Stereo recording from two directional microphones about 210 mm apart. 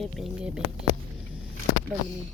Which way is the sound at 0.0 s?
Centre (ahead or behind).